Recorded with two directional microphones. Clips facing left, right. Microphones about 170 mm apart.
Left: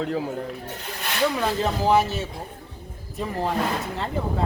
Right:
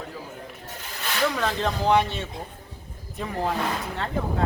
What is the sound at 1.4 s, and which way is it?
Speech, 5° left (ahead or behind).